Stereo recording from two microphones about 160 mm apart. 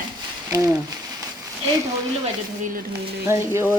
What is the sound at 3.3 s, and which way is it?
Speech, 15° right (ahead or behind).